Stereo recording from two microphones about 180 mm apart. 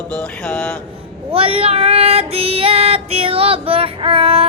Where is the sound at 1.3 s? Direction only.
30° right (ahead or behind).